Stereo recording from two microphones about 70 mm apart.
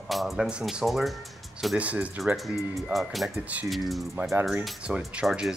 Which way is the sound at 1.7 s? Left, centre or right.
Centre.